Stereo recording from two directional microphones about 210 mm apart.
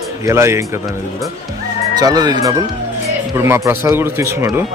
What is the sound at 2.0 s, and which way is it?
A man's voice, 20° right (ahead or behind).